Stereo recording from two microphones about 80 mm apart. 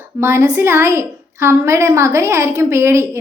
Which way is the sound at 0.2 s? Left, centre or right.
Right.